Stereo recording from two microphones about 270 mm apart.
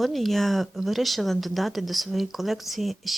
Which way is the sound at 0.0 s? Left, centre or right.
Centre.